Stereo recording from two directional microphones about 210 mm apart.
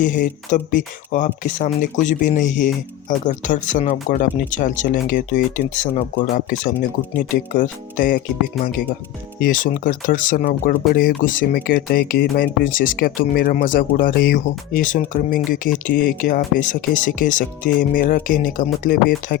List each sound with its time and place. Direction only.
0.0 s speech: 40° left (ahead or behind)
9.4 s speech: 40° left (ahead or behind)